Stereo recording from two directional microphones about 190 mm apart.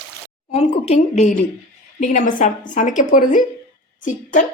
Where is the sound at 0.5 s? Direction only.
35° left (ahead or behind).